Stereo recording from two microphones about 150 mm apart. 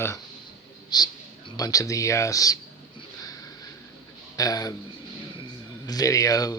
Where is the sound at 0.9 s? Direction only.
30° left (ahead or behind).